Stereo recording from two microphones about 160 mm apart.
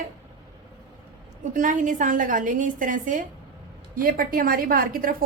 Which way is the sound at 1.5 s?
55° right (ahead or behind).